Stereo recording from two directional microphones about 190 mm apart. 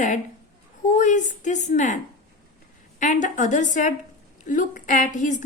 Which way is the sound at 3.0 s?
40° left (ahead or behind).